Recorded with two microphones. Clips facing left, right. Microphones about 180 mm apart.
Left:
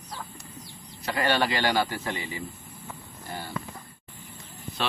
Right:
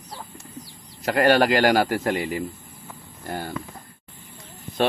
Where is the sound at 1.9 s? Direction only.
75° right (ahead or behind).